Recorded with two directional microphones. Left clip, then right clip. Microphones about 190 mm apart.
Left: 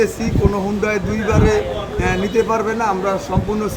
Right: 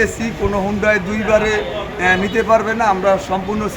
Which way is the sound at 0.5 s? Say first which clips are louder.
Right 4 dB; 5° right (ahead or behind).